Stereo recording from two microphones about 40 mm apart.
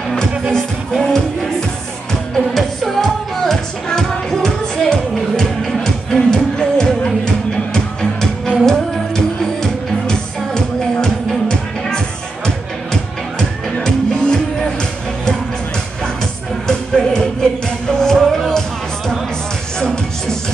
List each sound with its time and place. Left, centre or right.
0.1 s music: centre
16.6 s music: centre